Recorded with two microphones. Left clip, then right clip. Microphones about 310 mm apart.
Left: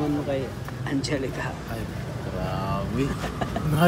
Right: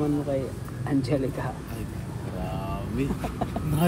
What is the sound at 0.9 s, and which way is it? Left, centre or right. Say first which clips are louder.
Speech: right 1 dB; centre.